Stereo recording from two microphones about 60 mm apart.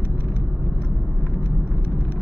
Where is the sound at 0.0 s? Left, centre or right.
Left.